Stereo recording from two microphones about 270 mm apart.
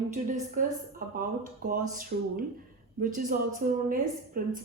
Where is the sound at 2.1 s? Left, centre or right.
Right.